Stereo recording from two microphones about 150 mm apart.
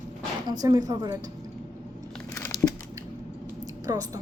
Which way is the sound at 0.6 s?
25° right (ahead or behind).